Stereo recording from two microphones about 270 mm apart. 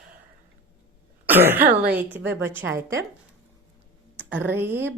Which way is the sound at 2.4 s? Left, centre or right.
Centre.